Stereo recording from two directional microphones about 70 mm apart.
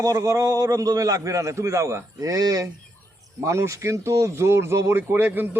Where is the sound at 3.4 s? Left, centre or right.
Right.